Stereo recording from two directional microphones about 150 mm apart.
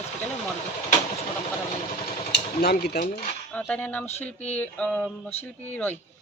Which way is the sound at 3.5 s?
10° left (ahead or behind).